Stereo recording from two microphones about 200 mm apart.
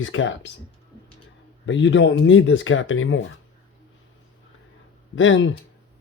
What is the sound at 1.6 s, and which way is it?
Speech, 65° left (ahead or behind).